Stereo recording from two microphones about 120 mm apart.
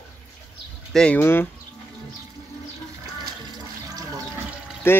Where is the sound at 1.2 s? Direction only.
20° left (ahead or behind).